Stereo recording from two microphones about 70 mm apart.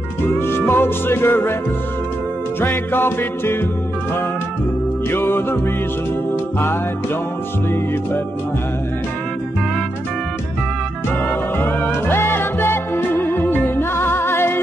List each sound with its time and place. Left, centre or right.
0.4 s music: left
2.6 s music: left
5.1 s music: left
11.5 s music: left